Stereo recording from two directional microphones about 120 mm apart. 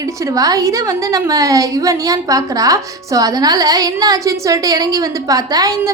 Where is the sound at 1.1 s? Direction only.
30° right (ahead or behind).